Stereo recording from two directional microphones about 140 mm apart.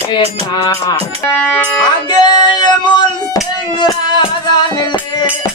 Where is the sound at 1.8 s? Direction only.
30° left (ahead or behind).